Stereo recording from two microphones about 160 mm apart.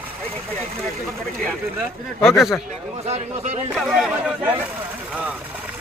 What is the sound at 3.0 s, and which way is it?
Speech, 45° right (ahead or behind).